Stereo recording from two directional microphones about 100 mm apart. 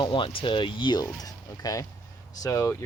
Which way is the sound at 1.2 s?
35° left (ahead or behind).